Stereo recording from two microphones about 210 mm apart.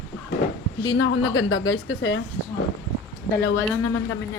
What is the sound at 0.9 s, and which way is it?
Speech, 90° left.